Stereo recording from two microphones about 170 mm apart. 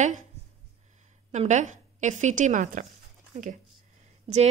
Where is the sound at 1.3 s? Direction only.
45° right (ahead or behind).